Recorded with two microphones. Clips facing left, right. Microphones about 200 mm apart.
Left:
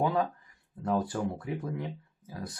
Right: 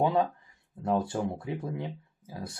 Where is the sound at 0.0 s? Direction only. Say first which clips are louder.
Right 2 dB; 25° right (ahead or behind).